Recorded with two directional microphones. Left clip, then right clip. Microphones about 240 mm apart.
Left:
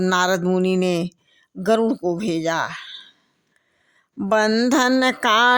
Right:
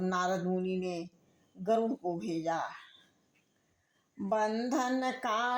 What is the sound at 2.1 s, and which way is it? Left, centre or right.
Speech, left.